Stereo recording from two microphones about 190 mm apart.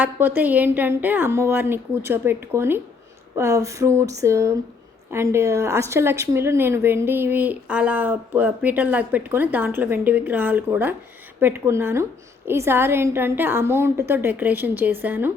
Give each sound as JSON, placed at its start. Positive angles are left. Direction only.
{"t": 0.0, "sound": "a woman's voice", "side_deg": -10}